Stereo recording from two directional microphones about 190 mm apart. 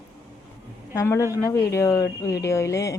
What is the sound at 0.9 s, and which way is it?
Speech, 15° left (ahead or behind).